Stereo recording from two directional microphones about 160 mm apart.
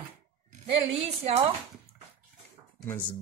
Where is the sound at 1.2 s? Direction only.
40° right (ahead or behind).